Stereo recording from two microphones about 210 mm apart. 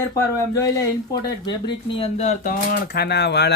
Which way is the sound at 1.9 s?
30° left (ahead or behind).